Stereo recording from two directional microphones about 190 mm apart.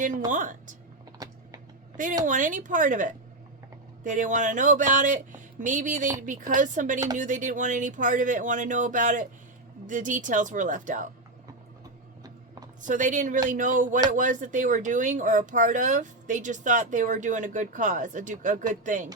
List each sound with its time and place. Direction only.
0.3 s speech: 45° right (ahead or behind)
1.2 s typing: 20° right (ahead or behind)
2.2 s speech: 45° right (ahead or behind)
12.8 s speech: 40° right (ahead or behind)